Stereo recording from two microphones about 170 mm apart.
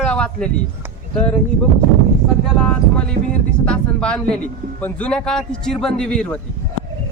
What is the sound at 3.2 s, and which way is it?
Speech, 60° right (ahead or behind).